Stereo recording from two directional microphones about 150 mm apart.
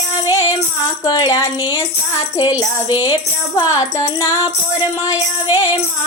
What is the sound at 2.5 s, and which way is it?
Tambourine, 15° right (ahead or behind).